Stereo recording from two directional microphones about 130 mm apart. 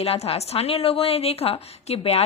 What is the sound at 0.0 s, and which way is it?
A woman's voice, 50° left (ahead or behind).